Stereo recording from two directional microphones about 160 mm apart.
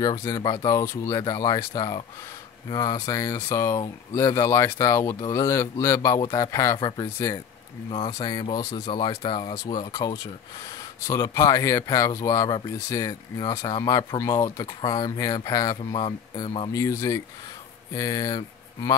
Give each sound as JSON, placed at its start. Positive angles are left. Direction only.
{"t": 0.0, "sound": "speech", "side_deg": 20}
{"t": 8.1, "sound": "speech", "side_deg": 25}
{"t": 16.7, "sound": "speech", "side_deg": 20}